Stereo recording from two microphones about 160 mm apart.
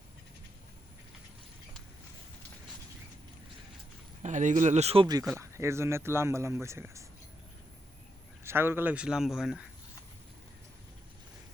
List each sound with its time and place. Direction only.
4.2 s speech: 50° right (ahead or behind)
5.4 s speech: 15° right (ahead or behind)
8.4 s speech: 15° right (ahead or behind)